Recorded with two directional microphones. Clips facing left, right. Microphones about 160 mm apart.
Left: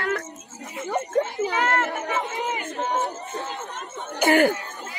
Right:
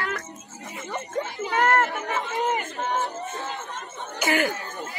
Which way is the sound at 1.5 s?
50° right (ahead or behind).